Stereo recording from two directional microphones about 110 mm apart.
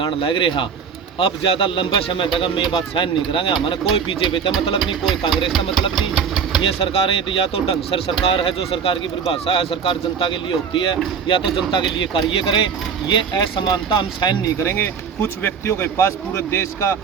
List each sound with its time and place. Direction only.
0.0 s speech: 50° left (ahead or behind)
5.5 s speech: centre (ahead or behind)
6.0 s engine: 5° right (ahead or behind)
6.6 s speech: 55° left (ahead or behind)
14.6 s speech: 20° left (ahead or behind)